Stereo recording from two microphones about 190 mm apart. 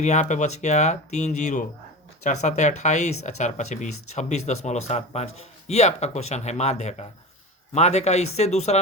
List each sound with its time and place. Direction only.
0.0 s speech: 40° left (ahead or behind)